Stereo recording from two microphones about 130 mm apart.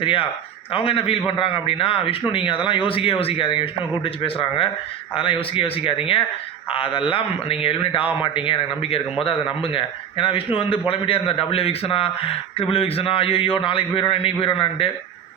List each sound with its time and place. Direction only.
0.0 s a man's voice: 40° left (ahead or behind)